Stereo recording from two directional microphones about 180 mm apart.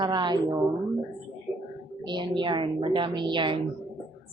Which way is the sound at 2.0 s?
25° right (ahead or behind).